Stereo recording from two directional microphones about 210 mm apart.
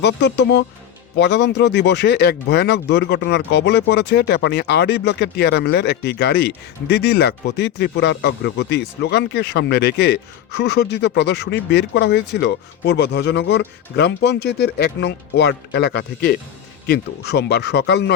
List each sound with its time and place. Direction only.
0.0 s speech: 55° left (ahead or behind)